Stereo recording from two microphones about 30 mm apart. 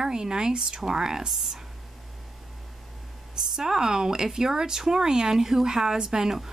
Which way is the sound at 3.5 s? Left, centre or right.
Centre.